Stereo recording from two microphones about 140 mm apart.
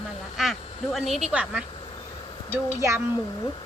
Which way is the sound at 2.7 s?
20° right (ahead or behind).